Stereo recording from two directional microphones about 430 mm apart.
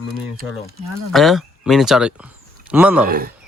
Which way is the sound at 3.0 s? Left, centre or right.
Centre.